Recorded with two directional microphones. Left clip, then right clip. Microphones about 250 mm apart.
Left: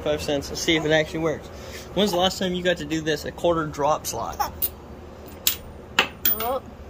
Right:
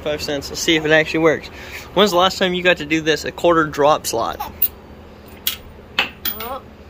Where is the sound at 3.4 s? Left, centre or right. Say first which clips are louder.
Right 8 dB; right.